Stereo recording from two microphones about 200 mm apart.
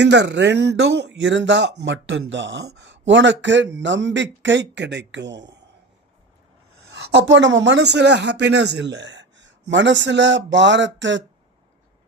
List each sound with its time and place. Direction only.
0.0 s speech: 60° right (ahead or behind)
6.9 s speech: 65° right (ahead or behind)